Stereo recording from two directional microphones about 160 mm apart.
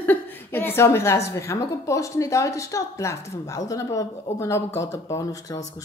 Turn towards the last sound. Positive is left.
turn(degrees=20)  # may be behind; listen again after turning